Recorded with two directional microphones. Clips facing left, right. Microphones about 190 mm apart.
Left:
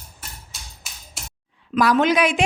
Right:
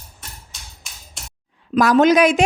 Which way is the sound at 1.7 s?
40° right (ahead or behind).